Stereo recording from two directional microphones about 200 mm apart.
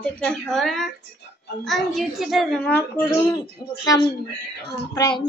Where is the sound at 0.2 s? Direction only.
5° left (ahead or behind).